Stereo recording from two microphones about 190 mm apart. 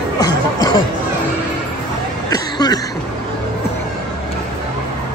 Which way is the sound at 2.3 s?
20° left (ahead or behind).